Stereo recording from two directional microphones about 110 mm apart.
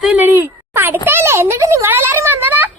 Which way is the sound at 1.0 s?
20° right (ahead or behind).